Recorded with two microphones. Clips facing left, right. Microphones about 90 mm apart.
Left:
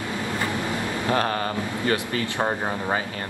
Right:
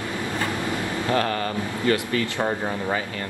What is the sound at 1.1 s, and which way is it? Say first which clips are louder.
Speech: even; 30° left (ahead or behind).